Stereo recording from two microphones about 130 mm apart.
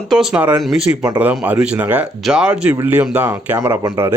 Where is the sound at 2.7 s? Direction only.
15° right (ahead or behind).